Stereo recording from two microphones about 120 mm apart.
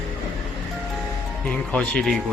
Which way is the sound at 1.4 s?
10° left (ahead or behind).